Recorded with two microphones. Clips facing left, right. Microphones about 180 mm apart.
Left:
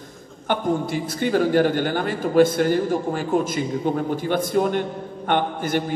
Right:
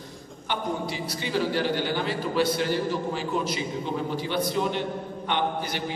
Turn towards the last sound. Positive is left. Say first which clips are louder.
# left 6 dB
turn(degrees=50)  # may be behind; listen again after turning